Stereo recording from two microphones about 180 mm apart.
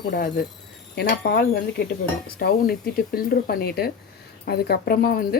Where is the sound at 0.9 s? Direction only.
60° left (ahead or behind).